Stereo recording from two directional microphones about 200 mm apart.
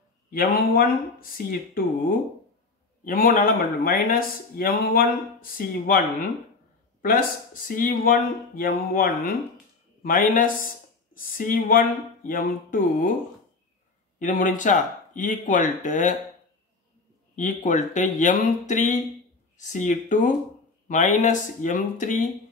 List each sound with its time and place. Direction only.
0.3 s speech: 45° left (ahead or behind)
7.0 s speech: 45° left (ahead or behind)
14.2 s speech: 40° left (ahead or behind)
17.4 s speech: 40° left (ahead or behind)